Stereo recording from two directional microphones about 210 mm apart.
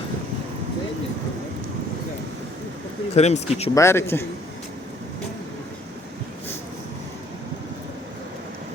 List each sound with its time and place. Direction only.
3.2 s speech: 30° left (ahead or behind)
3.8 s a man's voice: 15° left (ahead or behind)